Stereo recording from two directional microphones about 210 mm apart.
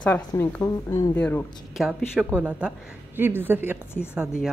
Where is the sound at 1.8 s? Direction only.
5° right (ahead or behind).